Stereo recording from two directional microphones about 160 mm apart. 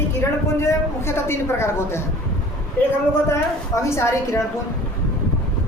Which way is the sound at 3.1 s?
20° left (ahead or behind).